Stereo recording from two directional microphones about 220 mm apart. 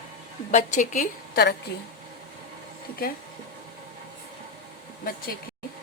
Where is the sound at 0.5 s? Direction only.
35° left (ahead or behind).